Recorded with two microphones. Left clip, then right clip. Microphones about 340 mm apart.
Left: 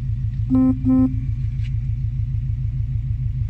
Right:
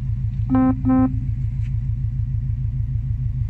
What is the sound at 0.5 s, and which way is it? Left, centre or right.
Music, right.